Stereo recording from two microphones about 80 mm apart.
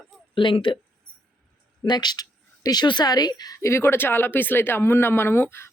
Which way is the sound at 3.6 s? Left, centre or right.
Left.